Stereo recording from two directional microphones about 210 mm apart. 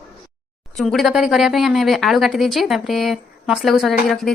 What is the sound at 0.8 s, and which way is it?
Speech, centre (ahead or behind).